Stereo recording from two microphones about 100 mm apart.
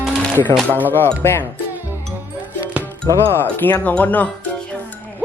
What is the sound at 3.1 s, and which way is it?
Speech, 25° left (ahead or behind).